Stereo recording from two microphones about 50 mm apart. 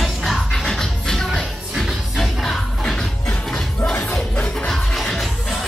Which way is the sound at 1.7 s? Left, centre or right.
Centre.